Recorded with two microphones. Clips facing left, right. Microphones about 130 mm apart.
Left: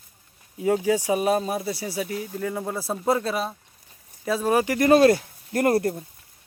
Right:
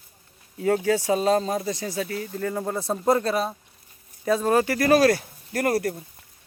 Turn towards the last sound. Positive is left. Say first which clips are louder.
# left 3 dB
turn(degrees=25)  # may be behind; listen again after turning